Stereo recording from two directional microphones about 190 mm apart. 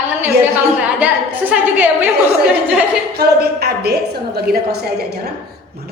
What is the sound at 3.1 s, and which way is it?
A woman's voice, 55° right (ahead or behind).